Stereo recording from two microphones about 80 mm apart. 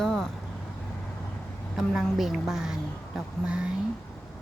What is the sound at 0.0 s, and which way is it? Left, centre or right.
Vehicle, centre.